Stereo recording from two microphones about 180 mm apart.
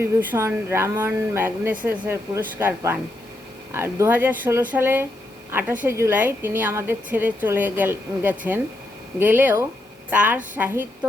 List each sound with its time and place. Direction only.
0.0 s a woman's voice: 10° right (ahead or behind)